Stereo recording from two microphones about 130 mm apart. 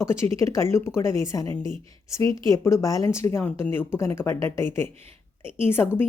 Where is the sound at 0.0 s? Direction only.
20° left (ahead or behind).